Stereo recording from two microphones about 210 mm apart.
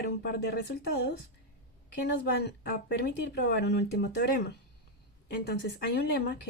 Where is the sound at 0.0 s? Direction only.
50° left (ahead or behind).